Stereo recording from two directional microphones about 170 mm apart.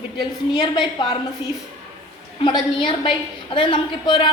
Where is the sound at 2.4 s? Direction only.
30° left (ahead or behind).